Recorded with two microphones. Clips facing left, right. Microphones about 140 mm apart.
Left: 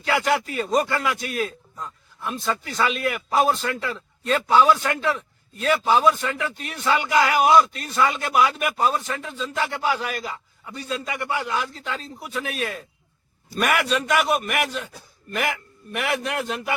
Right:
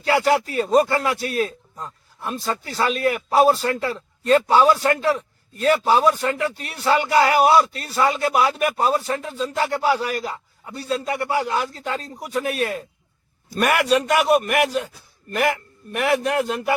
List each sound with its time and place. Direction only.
0.1 s a man's voice: 35° right (ahead or behind)